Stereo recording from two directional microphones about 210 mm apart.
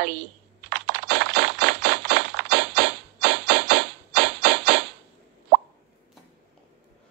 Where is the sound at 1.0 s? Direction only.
55° right (ahead or behind).